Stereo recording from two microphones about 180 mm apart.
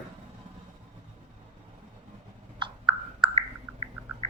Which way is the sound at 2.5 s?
25° right (ahead or behind).